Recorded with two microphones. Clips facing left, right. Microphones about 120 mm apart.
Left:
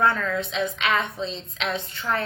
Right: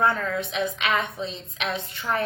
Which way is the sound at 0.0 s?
25° right (ahead or behind).